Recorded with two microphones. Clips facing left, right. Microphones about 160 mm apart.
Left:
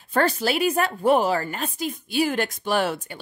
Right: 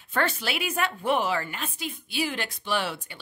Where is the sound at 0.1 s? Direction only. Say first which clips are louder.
Left 6 dB; 35° left (ahead or behind).